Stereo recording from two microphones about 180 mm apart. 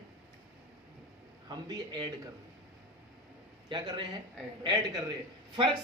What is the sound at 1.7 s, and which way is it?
Speech, 25° right (ahead or behind).